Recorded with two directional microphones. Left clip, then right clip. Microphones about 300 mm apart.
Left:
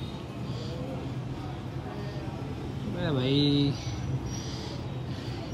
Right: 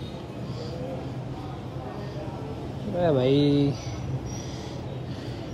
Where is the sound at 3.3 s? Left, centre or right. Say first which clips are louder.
Right 4 dB; centre.